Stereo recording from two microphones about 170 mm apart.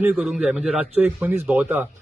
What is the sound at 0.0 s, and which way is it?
A man's voice, 10° right (ahead or behind).